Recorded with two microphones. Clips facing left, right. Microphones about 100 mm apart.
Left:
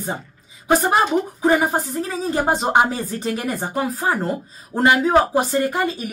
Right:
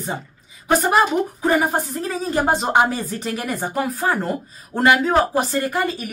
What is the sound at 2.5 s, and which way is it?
A woman's voice, 25° left (ahead or behind).